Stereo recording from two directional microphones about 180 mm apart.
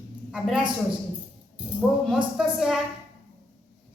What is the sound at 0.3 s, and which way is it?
Speech, centre (ahead or behind).